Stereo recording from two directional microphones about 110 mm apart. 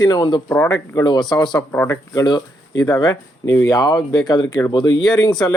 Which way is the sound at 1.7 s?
20° left (ahead or behind).